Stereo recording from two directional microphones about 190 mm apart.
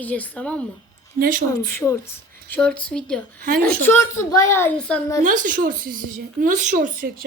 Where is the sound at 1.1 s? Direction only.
45° right (ahead or behind).